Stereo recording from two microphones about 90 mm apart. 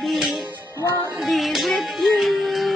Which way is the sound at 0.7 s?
35° left (ahead or behind).